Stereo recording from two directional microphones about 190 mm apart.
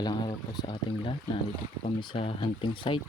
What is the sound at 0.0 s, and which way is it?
Speech, 20° left (ahead or behind).